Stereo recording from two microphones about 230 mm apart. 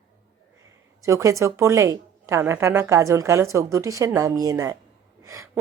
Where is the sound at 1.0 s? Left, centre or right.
Centre.